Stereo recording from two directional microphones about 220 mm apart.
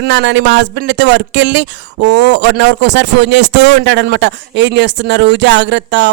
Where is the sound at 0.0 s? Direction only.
55° right (ahead or behind).